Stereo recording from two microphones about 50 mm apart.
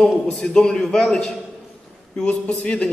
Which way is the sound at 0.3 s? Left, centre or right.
Centre.